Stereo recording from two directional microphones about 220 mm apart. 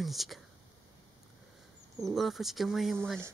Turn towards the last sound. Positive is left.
turn(degrees=0)  # may be behind; listen again after turning